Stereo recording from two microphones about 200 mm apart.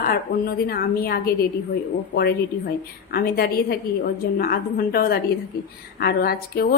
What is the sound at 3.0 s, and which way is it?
A woman's voice, 50° left (ahead or behind).